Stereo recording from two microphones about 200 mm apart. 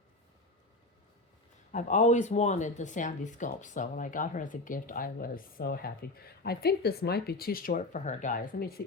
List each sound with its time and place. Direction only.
1.7 s speech: 35° left (ahead or behind)